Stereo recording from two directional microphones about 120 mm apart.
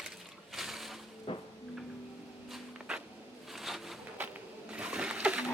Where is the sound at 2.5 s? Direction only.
5° right (ahead or behind).